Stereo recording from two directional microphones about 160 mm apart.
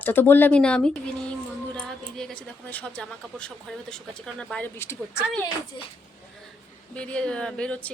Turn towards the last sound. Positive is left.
turn(degrees=5)  # may be behind; listen again after turning